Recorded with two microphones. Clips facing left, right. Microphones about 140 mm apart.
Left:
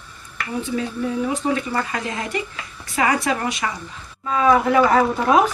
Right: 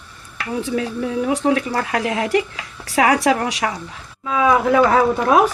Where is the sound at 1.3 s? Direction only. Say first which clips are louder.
Right 4 dB; 85° right.